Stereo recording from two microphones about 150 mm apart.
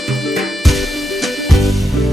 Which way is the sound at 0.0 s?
Centre (ahead or behind).